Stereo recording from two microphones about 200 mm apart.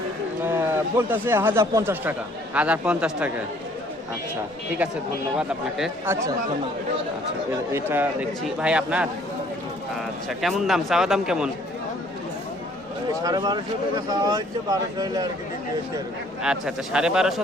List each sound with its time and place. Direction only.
0.4 s a man's voice: 10° right (ahead or behind)
4.8 s a man's voice: 5° right (ahead or behind)
6.1 s a man's voice: 15° right (ahead or behind)
7.7 s a man's voice: 10° right (ahead or behind)
10.2 s a man's voice: centre (ahead or behind)
13.2 s speech: 20° right (ahead or behind)
16.4 s a man's voice: 5° right (ahead or behind)